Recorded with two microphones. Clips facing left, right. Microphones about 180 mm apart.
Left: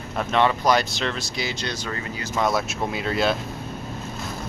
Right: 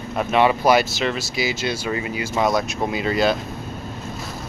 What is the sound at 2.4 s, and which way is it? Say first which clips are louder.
Speech: right 2 dB; 5° left (ahead or behind).